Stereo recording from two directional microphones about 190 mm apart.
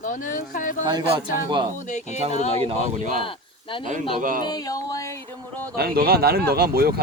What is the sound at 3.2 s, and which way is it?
Speech, 25° left (ahead or behind).